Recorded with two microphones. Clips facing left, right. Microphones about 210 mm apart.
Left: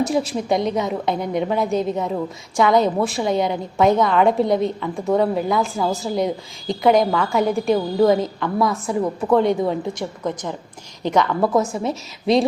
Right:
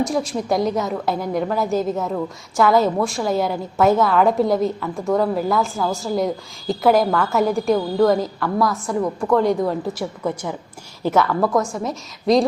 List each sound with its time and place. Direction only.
0.0 s a woman's voice: centre (ahead or behind)